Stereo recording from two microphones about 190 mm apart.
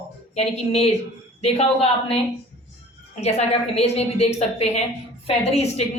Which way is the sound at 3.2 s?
35° left (ahead or behind).